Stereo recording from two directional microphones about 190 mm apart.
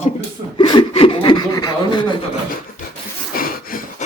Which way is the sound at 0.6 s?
25° left (ahead or behind).